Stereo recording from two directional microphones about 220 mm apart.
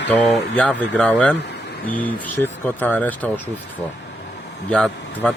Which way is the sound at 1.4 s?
50° left (ahead or behind).